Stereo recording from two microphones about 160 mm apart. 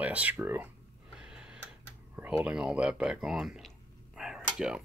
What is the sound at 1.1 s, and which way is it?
Tick-tock, 5° right (ahead or behind).